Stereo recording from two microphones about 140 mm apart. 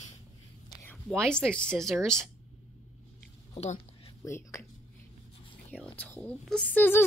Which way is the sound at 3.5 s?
50° left (ahead or behind).